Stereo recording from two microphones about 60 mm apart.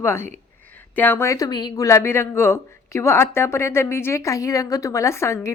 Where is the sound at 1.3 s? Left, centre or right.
Left.